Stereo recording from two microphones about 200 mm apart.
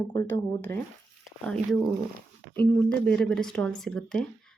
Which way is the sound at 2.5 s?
10° left (ahead or behind).